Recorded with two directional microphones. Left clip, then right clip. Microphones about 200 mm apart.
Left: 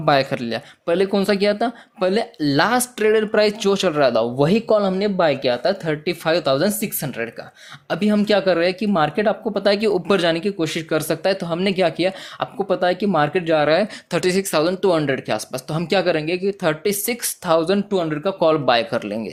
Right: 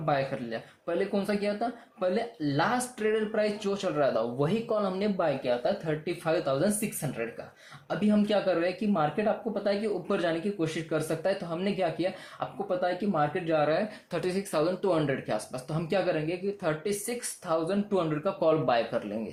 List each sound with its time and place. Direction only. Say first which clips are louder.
0.0 s speech: left 11 dB; 45° left (ahead or behind)